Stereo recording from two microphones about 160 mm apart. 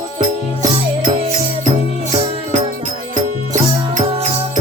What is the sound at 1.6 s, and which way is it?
Music, 50° right (ahead or behind).